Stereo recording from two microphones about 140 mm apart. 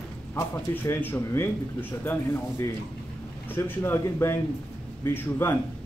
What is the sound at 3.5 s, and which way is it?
Speech, 15° left (ahead or behind).